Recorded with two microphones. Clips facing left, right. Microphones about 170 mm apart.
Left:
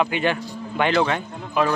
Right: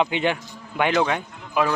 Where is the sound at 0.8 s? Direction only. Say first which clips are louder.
Left 1 dB; 10° right (ahead or behind).